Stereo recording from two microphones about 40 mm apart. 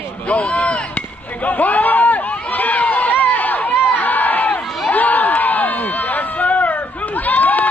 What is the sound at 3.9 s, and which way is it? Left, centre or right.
Crowd, left.